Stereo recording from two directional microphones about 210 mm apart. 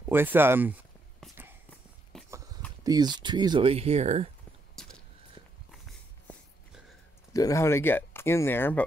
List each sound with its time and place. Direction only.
0.1 s speech: 10° right (ahead or behind)
1.2 s a sound: 5° left (ahead or behind)
2.1 s walk: 5° left (ahead or behind)
2.8 s speech: 20° right (ahead or behind)
4.8 s a sound: centre (ahead or behind)
5.7 s dog: centre (ahead or behind)
7.3 s speech: 15° left (ahead or behind)